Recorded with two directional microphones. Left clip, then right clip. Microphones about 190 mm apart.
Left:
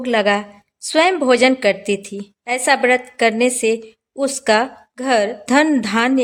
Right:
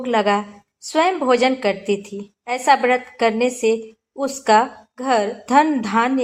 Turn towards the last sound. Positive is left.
turn(degrees=35)  # may be behind; listen again after turning